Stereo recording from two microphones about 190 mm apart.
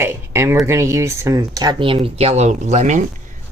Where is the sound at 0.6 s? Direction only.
15° right (ahead or behind).